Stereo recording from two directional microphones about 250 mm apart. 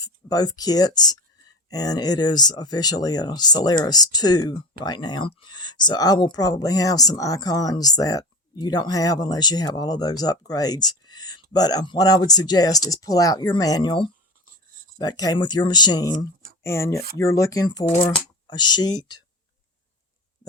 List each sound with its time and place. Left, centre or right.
0.0 s speech: centre